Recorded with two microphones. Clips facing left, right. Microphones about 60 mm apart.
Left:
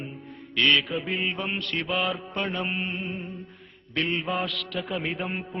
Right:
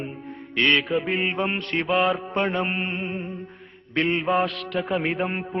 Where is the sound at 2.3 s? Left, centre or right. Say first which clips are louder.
Right 5 dB; right.